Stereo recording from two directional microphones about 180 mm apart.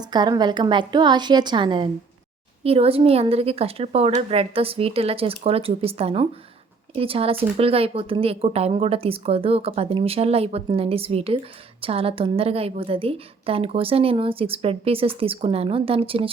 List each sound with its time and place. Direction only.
0.0 s a woman's voice: 25° right (ahead or behind)